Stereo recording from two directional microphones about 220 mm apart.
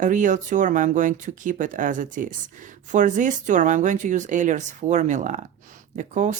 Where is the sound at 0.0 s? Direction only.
35° right (ahead or behind).